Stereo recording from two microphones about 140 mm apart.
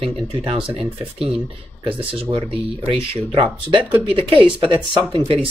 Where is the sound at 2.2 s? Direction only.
45° right (ahead or behind).